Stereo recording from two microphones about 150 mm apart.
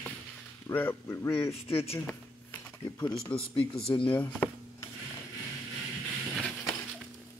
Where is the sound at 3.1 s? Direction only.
35° left (ahead or behind).